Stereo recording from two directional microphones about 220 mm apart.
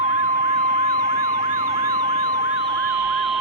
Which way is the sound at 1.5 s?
15° right (ahead or behind).